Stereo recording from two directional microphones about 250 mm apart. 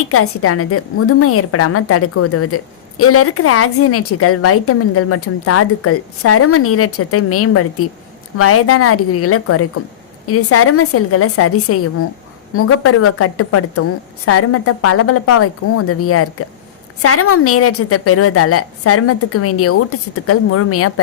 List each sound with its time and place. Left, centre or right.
0.1 s a woman's voice: left